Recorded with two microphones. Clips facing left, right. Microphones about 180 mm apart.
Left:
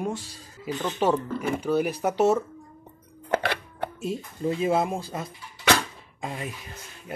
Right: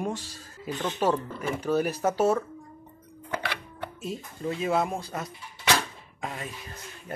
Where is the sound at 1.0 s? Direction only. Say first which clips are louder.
Left 3 dB; 15° left (ahead or behind).